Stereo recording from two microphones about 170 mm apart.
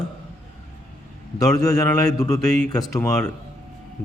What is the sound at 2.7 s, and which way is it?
Speech, 20° left (ahead or behind).